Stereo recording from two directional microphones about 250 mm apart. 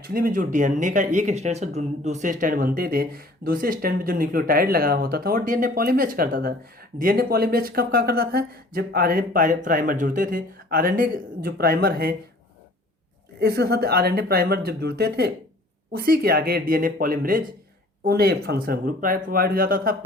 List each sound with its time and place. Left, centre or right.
0.0 s speech: right
13.4 s speech: right